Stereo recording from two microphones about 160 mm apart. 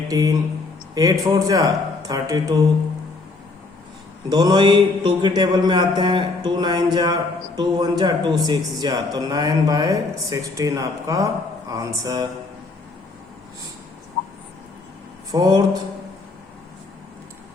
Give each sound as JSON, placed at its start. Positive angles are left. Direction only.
{"t": 0.1, "sound": "mantra", "side_deg": -25}
{"t": 4.3, "sound": "mantra", "side_deg": -25}
{"t": 15.3, "sound": "mantra", "side_deg": -25}